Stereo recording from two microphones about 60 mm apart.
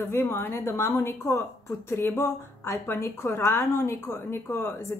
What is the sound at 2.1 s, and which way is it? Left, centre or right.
A woman's voice, left.